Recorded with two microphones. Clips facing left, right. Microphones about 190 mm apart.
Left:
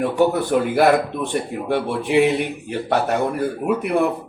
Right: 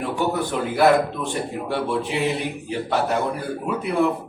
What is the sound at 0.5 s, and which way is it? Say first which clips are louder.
Speech: left 7 dB; 60° left (ahead or behind).